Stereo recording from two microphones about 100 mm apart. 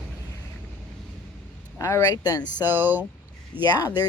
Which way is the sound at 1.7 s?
35° left (ahead or behind).